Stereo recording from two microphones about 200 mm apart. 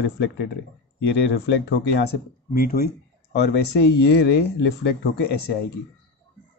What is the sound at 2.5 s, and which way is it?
Speech, 45° left (ahead or behind).